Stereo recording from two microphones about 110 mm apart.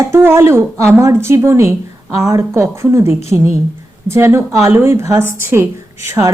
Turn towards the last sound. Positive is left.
turn(degrees=-25)  # may be behind; listen again after turning